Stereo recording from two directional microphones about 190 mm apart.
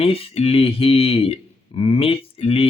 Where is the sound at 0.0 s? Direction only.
30° left (ahead or behind).